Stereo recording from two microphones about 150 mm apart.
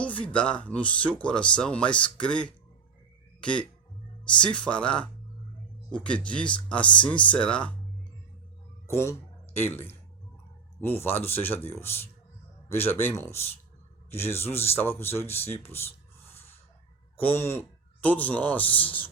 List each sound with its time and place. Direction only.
0.0 s speech: 10° left (ahead or behind)
8.9 s speech: 20° left (ahead or behind)
15.7 s a sound: 15° left (ahead or behind)
17.2 s speech: 15° left (ahead or behind)